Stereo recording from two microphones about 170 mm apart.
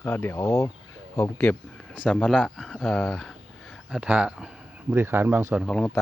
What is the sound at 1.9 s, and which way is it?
Speech, centre (ahead or behind).